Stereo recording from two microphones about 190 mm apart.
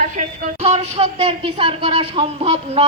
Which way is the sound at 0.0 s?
40° right (ahead or behind).